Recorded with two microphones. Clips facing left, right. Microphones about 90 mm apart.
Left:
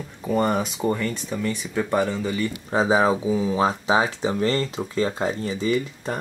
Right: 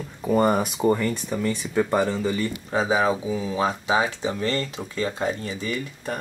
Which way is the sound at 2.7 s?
25° left (ahead or behind).